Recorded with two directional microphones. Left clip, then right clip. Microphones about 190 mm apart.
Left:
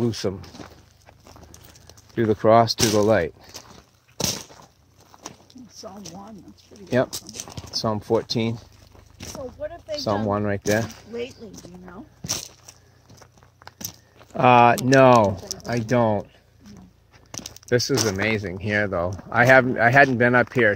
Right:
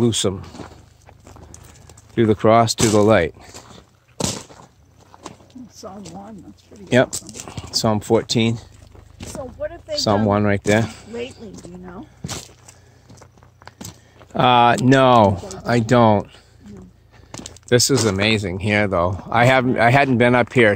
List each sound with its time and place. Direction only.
0.0 s speech: 5° right (ahead or behind)
0.6 s speech: 55° left (ahead or behind)
2.1 s speech: 5° right (ahead or behind)
4.2 s a sound: 55° left (ahead or behind)
7.3 s speech: 45° left (ahead or behind)
7.7 s speech: 15° right (ahead or behind)
9.6 s speech: 15° left (ahead or behind)
9.9 s speech: 15° right (ahead or behind)
12.2 s a sound: 50° left (ahead or behind)
14.3 s speech: 15° right (ahead or behind)
17.3 s a sound: 55° left (ahead or behind)
17.6 s speech: 10° right (ahead or behind)